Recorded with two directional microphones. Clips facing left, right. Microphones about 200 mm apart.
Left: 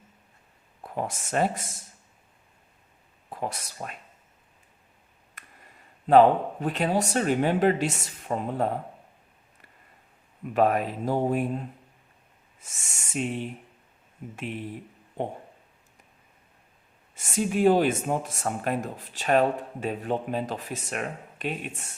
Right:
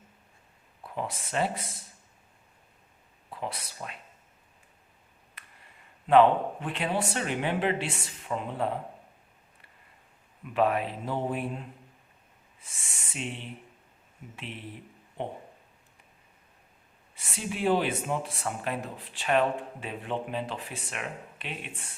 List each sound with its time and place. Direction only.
0.8 s speech: 45° left (ahead or behind)
3.2 s speech: 45° left (ahead or behind)
5.4 s a sound: 45° left (ahead or behind)
6.1 s speech: 40° left (ahead or behind)
10.4 s speech: 45° left (ahead or behind)
17.2 s speech: 45° left (ahead or behind)